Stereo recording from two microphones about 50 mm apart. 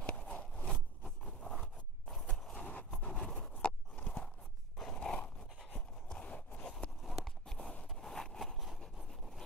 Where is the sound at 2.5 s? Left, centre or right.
Left.